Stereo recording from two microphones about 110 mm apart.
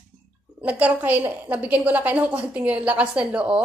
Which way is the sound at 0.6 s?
15° right (ahead or behind).